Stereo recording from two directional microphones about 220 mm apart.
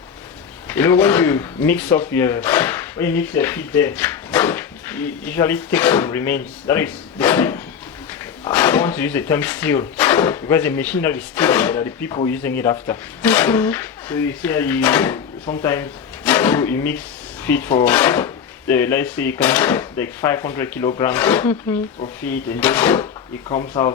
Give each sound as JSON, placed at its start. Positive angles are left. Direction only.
{"t": 0.7, "sound": "speech", "side_deg": 10}